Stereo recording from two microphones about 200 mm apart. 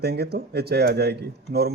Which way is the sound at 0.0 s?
55° right (ahead or behind).